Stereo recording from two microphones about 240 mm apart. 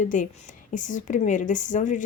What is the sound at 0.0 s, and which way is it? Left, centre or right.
Speech, left.